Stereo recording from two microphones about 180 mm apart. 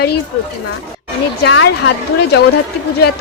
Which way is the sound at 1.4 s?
75° left (ahead or behind).